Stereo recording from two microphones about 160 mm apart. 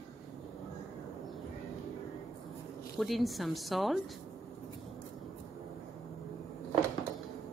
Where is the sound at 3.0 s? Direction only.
Centre (ahead or behind).